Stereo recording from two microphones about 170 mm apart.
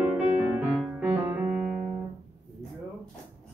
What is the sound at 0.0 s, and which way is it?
Music, 10° right (ahead or behind).